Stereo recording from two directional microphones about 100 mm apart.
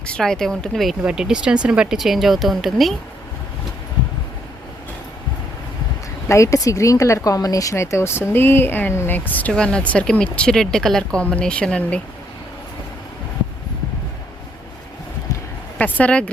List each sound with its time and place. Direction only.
0.1 s speech: 5° left (ahead or behind)
6.2 s speech: 30° left (ahead or behind); by 12.0 s 10° left (ahead or behind)
15.8 s speech: 15° left (ahead or behind)